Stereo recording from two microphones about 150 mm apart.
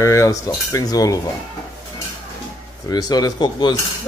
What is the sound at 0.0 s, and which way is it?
Speech, 20° left (ahead or behind).